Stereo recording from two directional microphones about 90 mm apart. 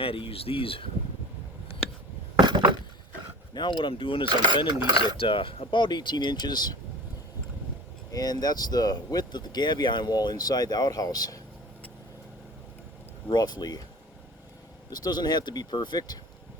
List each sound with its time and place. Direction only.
0.0 s speech: 90° left
2.4 s a sound: 55° right (ahead or behind)
3.5 s speech: 60° left (ahead or behind)
8.1 s speech: 45° left (ahead or behind)
13.2 s speech: 55° left (ahead or behind)
14.8 s speech: 50° left (ahead or behind)